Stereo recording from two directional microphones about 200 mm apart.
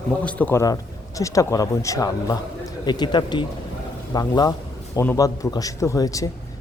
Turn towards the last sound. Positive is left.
turn(degrees=15)  # may be behind; listen again after turning